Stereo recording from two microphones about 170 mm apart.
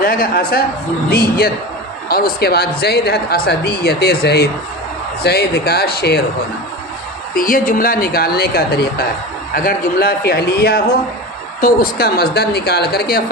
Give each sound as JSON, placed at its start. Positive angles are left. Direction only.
{"t": 0.0, "sound": "speech", "side_deg": 55}
{"t": 7.3, "sound": "speech", "side_deg": 55}